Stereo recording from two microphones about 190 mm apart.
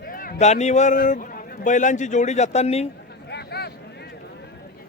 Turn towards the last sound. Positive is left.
turn(degrees=60)  # may be behind; listen again after turning